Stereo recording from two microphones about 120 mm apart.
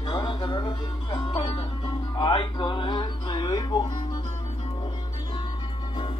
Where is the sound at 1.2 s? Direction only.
50° left (ahead or behind); by 4.2 s 30° left (ahead or behind).